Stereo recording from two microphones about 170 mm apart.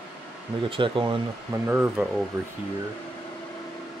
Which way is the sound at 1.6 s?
10° right (ahead or behind).